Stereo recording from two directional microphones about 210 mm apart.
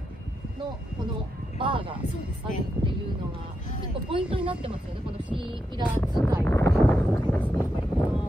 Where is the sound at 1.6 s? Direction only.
25° right (ahead or behind).